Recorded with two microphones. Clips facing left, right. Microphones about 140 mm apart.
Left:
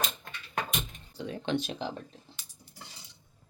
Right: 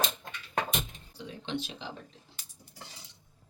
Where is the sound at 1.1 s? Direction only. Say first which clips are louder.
Left 5 dB; 50° left (ahead or behind).